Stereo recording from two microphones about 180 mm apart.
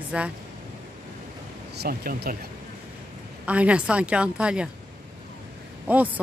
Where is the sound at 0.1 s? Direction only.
5° right (ahead or behind).